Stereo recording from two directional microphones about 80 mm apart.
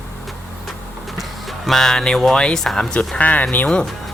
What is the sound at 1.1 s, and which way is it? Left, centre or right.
Speech, centre.